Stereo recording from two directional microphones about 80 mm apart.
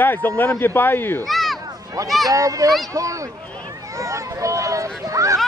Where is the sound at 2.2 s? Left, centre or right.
Right.